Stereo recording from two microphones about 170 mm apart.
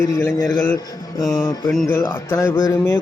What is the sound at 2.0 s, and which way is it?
Speech, 15° left (ahead or behind).